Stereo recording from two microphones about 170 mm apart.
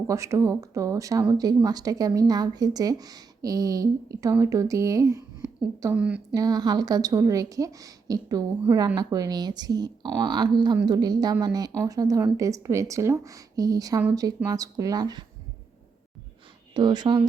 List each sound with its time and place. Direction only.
0.1 s speech: 20° right (ahead or behind)
5.9 s a woman's voice: 5° right (ahead or behind)
6.3 s speech: 20° right (ahead or behind)
16.7 s speech: 25° right (ahead or behind)